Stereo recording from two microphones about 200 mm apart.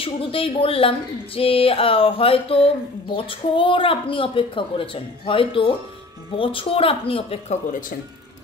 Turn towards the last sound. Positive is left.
turn(degrees=40)  # may be behind; listen again after turning